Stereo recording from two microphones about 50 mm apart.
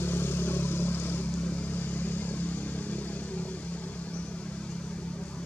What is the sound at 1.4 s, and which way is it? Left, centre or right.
Vehicle, left.